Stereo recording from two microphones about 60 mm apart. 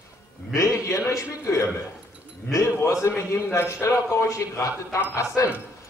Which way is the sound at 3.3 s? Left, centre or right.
Left.